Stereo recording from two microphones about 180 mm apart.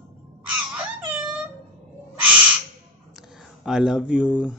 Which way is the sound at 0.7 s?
5° right (ahead or behind).